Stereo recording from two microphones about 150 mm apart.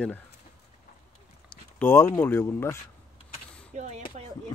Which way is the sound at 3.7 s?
50° right (ahead or behind).